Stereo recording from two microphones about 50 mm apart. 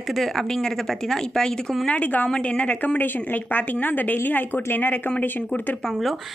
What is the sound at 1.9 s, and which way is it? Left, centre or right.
Speech, left.